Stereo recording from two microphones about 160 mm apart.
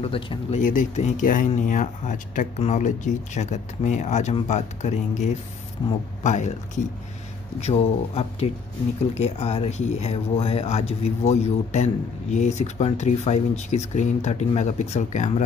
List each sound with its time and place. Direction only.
0.0 s speech: 35° left (ahead or behind)
0.6 s speech: 55° left (ahead or behind)
7.6 s speech: 40° left (ahead or behind)